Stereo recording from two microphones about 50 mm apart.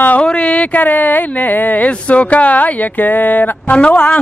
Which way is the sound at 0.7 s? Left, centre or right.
Left.